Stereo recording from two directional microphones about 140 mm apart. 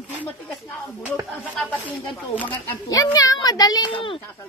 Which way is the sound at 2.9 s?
25° left (ahead or behind).